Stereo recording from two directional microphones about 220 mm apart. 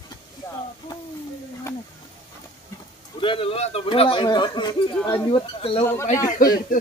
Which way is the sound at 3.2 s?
25° left (ahead or behind).